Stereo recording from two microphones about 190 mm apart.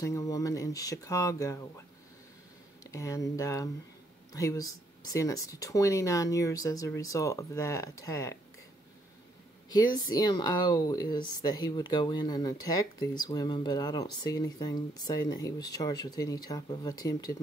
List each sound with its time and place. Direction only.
0.0 s speech: 15° left (ahead or behind)
2.8 s speech: 15° left (ahead or behind)
10.1 s speech: 20° left (ahead or behind)